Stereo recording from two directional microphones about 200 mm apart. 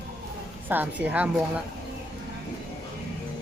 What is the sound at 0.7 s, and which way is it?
Speech, 10° right (ahead or behind).